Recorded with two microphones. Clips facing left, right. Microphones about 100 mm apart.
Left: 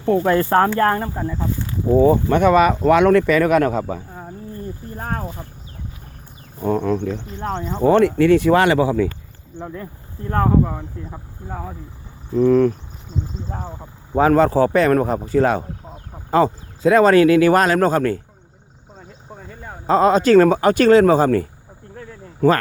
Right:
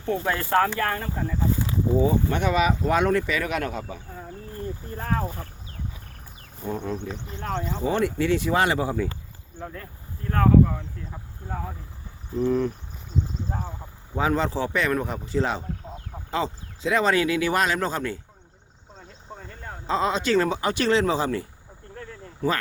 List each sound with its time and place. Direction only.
0.0 s speech: 45° left (ahead or behind)
1.9 s speech: 55° left (ahead or behind)
2.8 s speech: 70° left (ahead or behind); by 4.0 s 45° left (ahead or behind)
6.6 s speech: 75° left (ahead or behind)
7.3 s speech: 25° left (ahead or behind)
7.8 s speech: 65° left (ahead or behind); by 9.0 s 90° left
9.6 s speech: 25° left (ahead or behind)
11.4 s speech: 10° left (ahead or behind)
12.4 s speech: 75° left (ahead or behind)
14.1 s speech: 50° left (ahead or behind)
18.9 s a sound: 10° left (ahead or behind)
19.9 s speech: 45° left (ahead or behind)
21.9 s a sound: 5° left (ahead or behind)